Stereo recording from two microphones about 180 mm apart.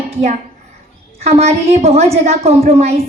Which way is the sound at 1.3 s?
35° right (ahead or behind).